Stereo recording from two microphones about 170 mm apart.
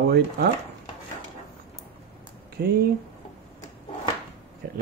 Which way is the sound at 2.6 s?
70° right (ahead or behind).